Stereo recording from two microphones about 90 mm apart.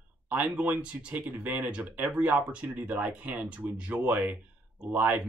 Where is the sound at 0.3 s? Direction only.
15° right (ahead or behind).